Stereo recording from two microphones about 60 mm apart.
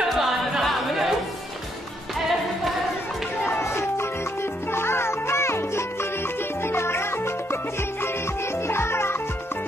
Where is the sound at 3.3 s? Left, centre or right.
Left.